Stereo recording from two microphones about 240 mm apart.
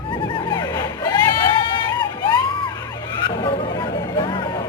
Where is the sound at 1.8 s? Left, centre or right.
Centre.